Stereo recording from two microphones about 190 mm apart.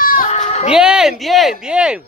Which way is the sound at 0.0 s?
50° left (ahead or behind).